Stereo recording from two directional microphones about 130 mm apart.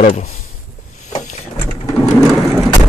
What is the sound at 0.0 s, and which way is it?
Speech, 65° left (ahead or behind).